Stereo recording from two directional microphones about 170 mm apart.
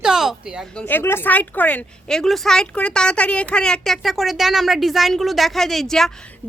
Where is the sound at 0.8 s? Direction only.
10° left (ahead or behind).